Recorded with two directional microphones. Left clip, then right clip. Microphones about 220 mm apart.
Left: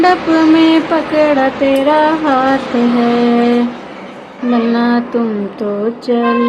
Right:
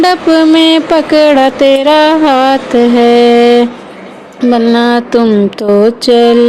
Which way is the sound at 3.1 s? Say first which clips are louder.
Right 9 dB; 40° right (ahead or behind).